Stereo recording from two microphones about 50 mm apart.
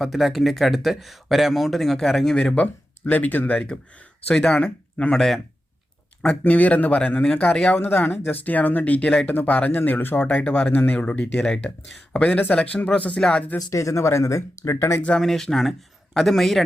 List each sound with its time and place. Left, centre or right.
0.0 s speech: centre
2.3 s speech: centre
5.1 s speech: centre
6.2 s speech: left
7.5 s speech: centre
7.8 s speech: left
10.2 s speech: centre
10.7 s speech: left
10.9 s speech: left
13.7 s speech: left
15.2 s speech: centre